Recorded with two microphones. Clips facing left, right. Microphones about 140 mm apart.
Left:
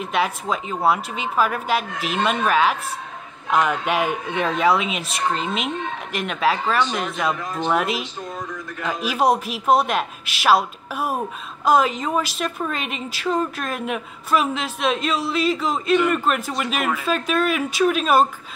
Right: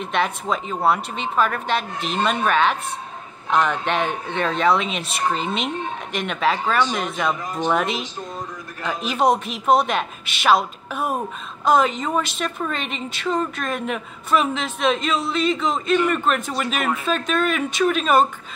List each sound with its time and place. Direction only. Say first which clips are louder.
0.0 s a woman's voice: even; 5° left (ahead or behind)